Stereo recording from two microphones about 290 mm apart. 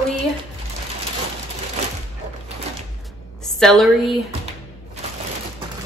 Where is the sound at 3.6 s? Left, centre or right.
Centre.